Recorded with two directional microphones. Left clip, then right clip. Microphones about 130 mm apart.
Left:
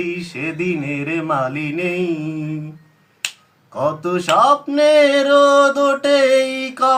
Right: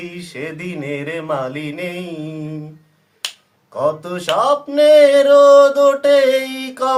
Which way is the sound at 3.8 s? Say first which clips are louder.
Even; 35° right (ahead or behind).